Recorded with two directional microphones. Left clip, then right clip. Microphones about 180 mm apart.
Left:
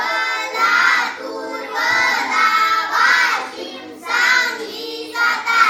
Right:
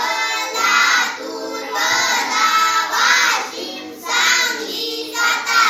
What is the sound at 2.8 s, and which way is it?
Child singing, centre (ahead or behind).